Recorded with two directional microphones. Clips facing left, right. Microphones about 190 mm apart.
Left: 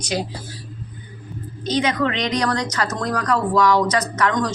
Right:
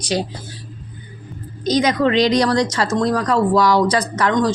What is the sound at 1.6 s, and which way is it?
Speech, 40° right (ahead or behind).